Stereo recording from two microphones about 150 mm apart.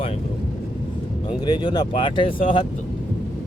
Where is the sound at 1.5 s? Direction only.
30° left (ahead or behind).